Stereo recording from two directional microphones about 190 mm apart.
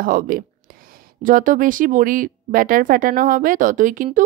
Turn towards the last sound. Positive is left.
turn(degrees=-45)  # may be behind; listen again after turning